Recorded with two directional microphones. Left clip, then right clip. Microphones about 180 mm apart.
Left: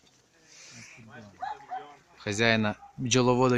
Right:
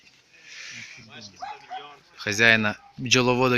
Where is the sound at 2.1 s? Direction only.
10° left (ahead or behind).